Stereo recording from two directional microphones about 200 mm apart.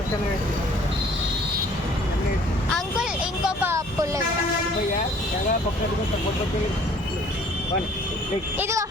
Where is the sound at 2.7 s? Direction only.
5° right (ahead or behind).